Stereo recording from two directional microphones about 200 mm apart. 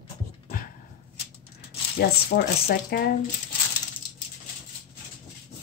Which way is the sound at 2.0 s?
50° left (ahead or behind).